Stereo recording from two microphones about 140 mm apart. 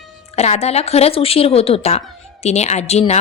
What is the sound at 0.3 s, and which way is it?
A woman's voice, 50° left (ahead or behind).